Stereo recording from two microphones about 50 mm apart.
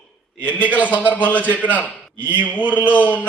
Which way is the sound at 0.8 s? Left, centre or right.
Left.